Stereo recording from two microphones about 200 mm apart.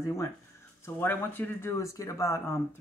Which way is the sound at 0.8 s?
10° left (ahead or behind).